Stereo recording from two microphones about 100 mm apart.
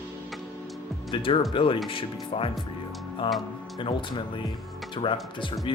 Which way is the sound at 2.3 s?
75° left (ahead or behind).